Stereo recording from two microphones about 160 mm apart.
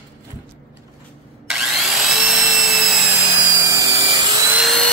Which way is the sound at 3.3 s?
15° right (ahead or behind).